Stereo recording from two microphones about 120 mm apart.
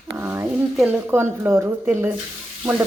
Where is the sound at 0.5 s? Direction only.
10° right (ahead or behind).